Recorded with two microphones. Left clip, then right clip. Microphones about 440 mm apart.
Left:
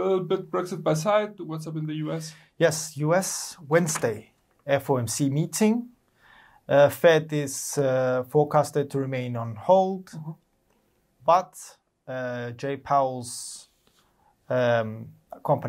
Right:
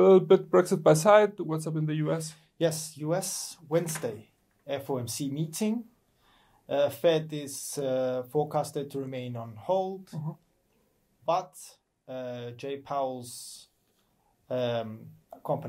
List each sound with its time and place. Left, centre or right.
0.0 s speech: right
2.5 s speech: left
11.2 s speech: left